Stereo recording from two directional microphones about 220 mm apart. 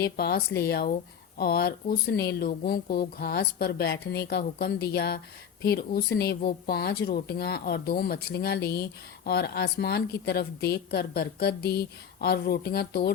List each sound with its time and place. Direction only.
0.0 s speech: 45° left (ahead or behind)